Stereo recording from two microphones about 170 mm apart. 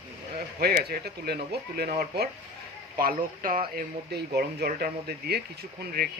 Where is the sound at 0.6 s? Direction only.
65° right (ahead or behind).